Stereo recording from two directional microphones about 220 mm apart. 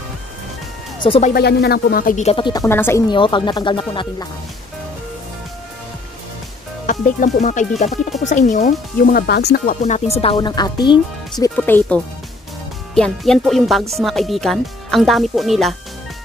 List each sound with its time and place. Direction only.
1.0 s speech: 25° left (ahead or behind)
1.3 s speech: 45° left (ahead or behind); by 4.3 s 20° left (ahead or behind)
6.9 s speech: 35° left (ahead or behind)
9.8 s speech: 30° left (ahead or behind)
11.5 s speech: 5° left (ahead or behind)